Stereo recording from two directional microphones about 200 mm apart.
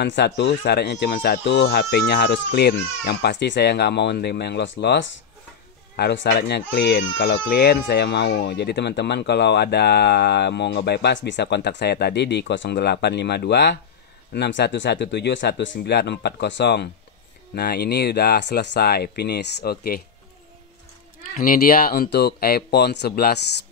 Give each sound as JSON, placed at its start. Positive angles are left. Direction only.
{"t": 0.0, "sound": "speech", "side_deg": 60}
{"t": 21.4, "sound": "speech", "side_deg": 45}